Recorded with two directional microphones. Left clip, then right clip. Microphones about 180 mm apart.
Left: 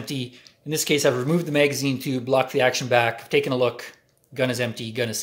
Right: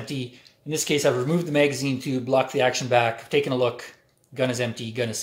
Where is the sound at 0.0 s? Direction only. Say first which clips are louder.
Left 1 dB; 25° left (ahead or behind).